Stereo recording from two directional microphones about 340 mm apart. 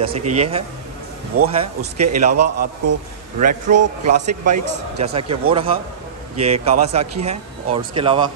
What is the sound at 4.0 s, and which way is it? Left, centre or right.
A man's voice, right.